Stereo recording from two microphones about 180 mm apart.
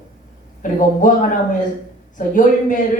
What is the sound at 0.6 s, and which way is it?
A woman's voice, 45° left (ahead or behind).